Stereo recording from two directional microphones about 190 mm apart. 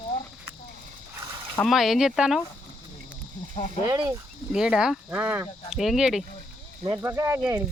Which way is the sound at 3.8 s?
20° right (ahead or behind).